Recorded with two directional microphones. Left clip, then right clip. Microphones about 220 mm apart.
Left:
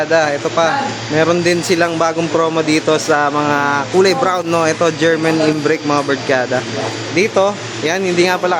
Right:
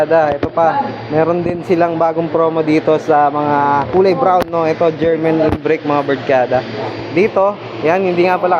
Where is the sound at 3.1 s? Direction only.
20° left (ahead or behind).